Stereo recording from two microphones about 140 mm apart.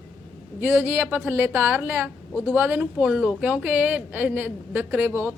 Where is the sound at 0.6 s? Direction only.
15° right (ahead or behind).